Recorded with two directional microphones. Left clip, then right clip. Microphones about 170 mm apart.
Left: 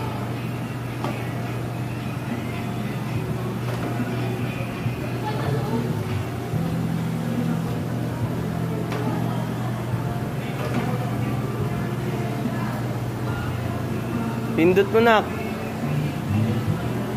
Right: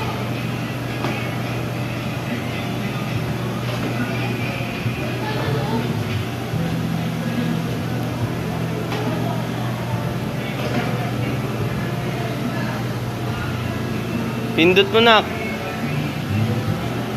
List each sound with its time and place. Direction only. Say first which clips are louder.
14.6 s speech: right 3 dB; 15° left (ahead or behind)